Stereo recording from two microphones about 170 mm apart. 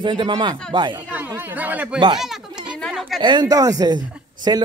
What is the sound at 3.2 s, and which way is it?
A man's voice, 25° right (ahead or behind).